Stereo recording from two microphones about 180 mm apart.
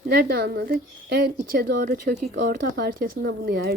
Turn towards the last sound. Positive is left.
turn(degrees=-60)  # may be behind; listen again after turning